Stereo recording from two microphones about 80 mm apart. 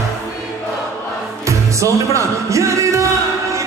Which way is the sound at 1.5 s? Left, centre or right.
Right.